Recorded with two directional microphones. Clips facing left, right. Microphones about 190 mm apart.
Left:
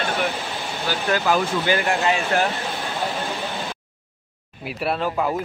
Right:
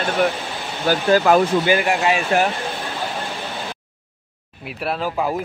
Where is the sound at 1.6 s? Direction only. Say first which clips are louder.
Right 3 dB; 15° right (ahead or behind).